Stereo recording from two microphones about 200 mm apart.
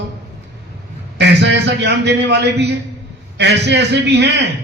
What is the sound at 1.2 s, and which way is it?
A man's voice, 60° right (ahead or behind).